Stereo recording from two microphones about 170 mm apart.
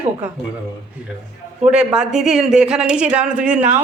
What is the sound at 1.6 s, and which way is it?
Speech, 5° right (ahead or behind).